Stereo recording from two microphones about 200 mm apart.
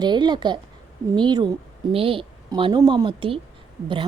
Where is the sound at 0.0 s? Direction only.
20° right (ahead or behind).